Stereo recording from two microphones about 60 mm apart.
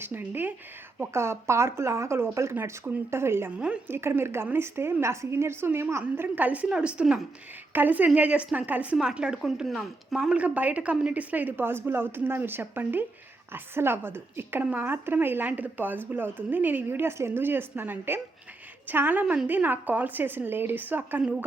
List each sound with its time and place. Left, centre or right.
0.0 s speech: right
1.1 s a woman's voice: right; by 7.2 s centre
7.7 s a woman's voice: right
9.0 s a woman's voice: centre; by 21.2 s right